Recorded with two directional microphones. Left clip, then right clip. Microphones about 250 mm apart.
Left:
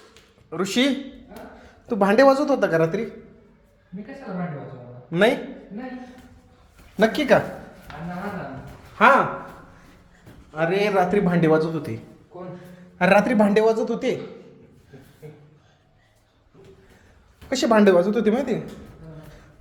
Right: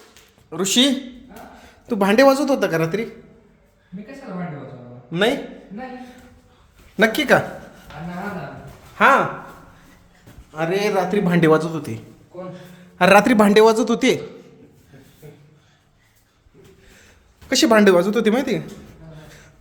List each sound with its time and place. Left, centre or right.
0.5 s a man's voice: centre
5.1 s a man's voice: centre
6.9 s a man's voice: centre
9.0 s speech: centre
10.5 s a man's voice: centre
11.3 s a man's voice: right
17.5 s a man's voice: right